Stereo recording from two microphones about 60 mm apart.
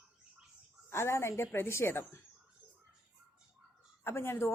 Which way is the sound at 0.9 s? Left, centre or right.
Left.